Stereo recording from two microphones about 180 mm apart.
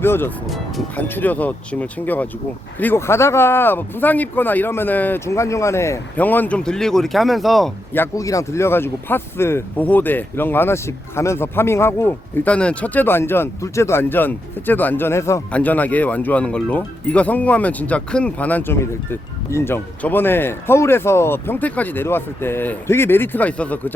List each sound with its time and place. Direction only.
0.0 s speech: 10° left (ahead or behind)
0.4 s speech: centre (ahead or behind)
1.0 s speech: 10° left (ahead or behind)
7.9 s speech: 15° left (ahead or behind)